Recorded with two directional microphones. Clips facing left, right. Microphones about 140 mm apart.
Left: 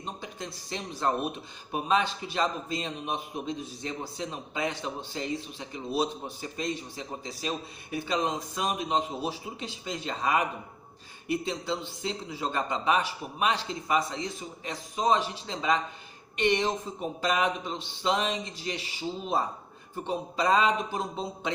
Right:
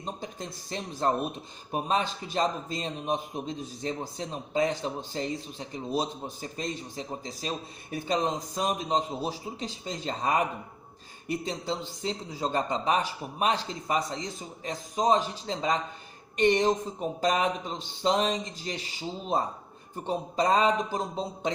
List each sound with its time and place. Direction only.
0.2 s a man's voice: 40° right (ahead or behind)
20.1 s a man's voice: 40° right (ahead or behind)